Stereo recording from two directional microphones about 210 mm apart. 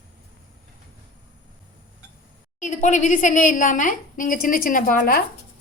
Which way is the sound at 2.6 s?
35° left (ahead or behind).